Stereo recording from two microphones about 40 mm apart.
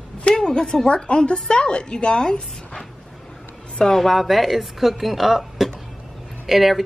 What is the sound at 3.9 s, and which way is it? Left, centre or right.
Speech, centre.